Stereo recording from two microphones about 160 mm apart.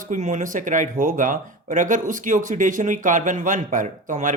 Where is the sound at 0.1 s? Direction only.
55° right (ahead or behind).